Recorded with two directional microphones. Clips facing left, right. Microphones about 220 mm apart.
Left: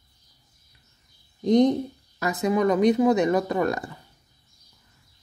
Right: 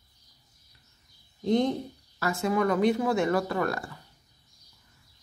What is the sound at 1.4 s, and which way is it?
Speech, 20° left (ahead or behind).